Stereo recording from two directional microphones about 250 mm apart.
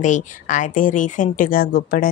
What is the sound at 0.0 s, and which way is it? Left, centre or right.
Speech, left.